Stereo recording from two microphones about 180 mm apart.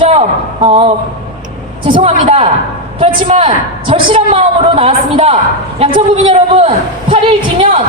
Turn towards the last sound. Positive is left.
turn(degrees=-30)  # may be behind; listen again after turning